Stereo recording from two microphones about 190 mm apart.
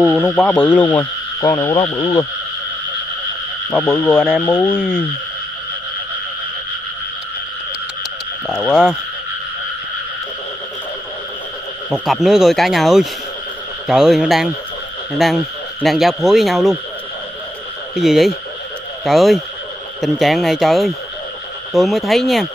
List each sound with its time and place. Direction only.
0.0 s speech: centre (ahead or behind)
1.4 s speech: 20° left (ahead or behind)
3.8 s speech: 10° left (ahead or behind)
8.5 s speech: centre (ahead or behind)
11.9 s speech: centre (ahead or behind)
17.9 s speech: centre (ahead or behind)